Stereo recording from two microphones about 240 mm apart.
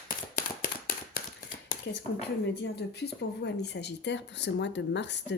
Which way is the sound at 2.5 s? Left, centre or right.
Left.